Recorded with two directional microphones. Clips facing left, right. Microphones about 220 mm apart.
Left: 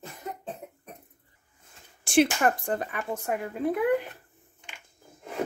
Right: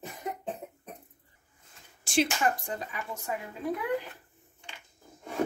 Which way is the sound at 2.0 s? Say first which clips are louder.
Left 5 dB; 55° left (ahead or behind).